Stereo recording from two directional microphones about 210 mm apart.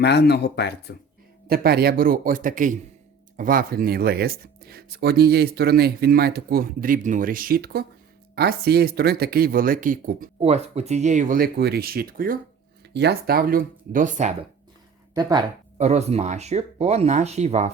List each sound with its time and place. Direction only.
0.0 s speech: 50° left (ahead or behind)
1.5 s speech: 45° right (ahead or behind)
15.1 s speech: 20° right (ahead or behind)
15.8 s speech: 30° right (ahead or behind)